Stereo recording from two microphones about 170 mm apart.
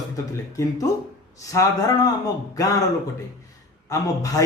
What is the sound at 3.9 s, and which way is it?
Speech, 20° left (ahead or behind).